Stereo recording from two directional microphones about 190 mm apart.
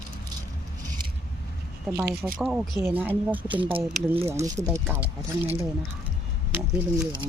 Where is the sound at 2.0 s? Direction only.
55° right (ahead or behind).